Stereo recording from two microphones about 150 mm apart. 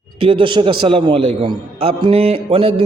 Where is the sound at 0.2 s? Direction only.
35° right (ahead or behind).